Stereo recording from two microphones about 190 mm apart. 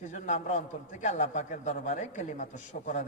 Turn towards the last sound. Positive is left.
turn(degrees=40)  # may be behind; listen again after turning